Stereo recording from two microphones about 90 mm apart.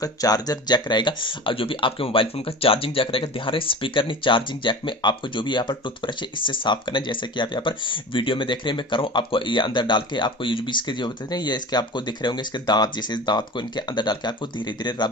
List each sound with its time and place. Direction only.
0.0 s speech: 45° left (ahead or behind)